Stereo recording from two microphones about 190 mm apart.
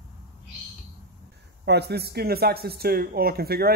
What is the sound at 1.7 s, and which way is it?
Speech, 60° right (ahead or behind).